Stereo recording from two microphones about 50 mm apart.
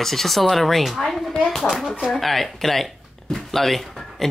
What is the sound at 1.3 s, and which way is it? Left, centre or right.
Speech, centre.